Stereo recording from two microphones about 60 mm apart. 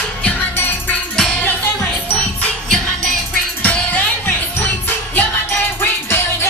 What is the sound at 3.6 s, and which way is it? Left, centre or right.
Music, left.